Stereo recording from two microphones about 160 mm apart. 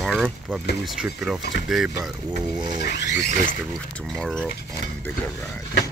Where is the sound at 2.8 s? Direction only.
90° left.